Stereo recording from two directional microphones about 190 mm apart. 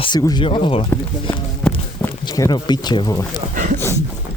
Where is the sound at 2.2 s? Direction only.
20° left (ahead or behind).